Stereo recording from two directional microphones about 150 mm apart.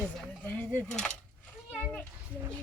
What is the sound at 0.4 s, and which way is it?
Speech, 15° left (ahead or behind).